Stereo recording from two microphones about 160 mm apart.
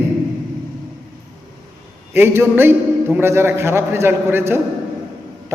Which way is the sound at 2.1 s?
15° right (ahead or behind).